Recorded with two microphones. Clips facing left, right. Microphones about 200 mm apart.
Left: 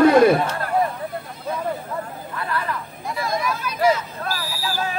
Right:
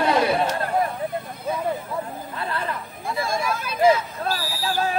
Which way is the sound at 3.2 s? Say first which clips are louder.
Left 1 dB; 30° right (ahead or behind).